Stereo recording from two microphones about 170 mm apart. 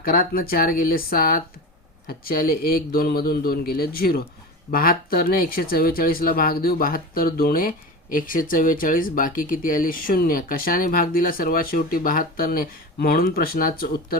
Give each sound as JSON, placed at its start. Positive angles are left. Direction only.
{"t": 0.0, "sound": "speech", "side_deg": 55}